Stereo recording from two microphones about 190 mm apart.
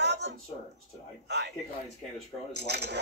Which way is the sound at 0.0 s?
65° right (ahead or behind).